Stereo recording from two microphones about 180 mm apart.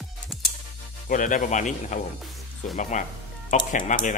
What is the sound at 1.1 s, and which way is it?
Speech, 45° left (ahead or behind).